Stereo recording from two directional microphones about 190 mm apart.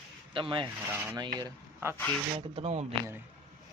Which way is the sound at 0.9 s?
10° right (ahead or behind).